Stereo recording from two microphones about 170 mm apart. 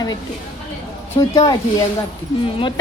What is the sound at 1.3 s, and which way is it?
Speech, 25° left (ahead or behind).